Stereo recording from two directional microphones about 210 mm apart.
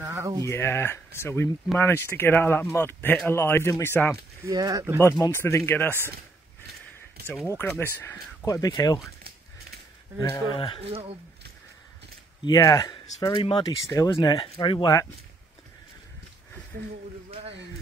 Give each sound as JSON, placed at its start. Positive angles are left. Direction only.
{"t": 0.0, "sound": "a sound", "side_deg": -15}
{"t": 0.5, "sound": "speech", "side_deg": 10}
{"t": 4.5, "sound": "speech", "side_deg": -15}
{"t": 5.0, "sound": "speech", "side_deg": 15}
{"t": 7.2, "sound": "speech", "side_deg": 10}
{"t": 10.3, "sound": "speech", "side_deg": 25}
{"t": 10.9, "sound": "speech", "side_deg": -25}
{"t": 12.4, "sound": "speech", "side_deg": 15}